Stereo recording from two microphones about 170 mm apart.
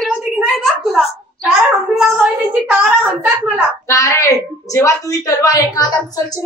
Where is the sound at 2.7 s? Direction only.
10° right (ahead or behind).